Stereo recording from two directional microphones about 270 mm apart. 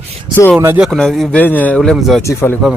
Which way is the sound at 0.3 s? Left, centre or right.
Centre.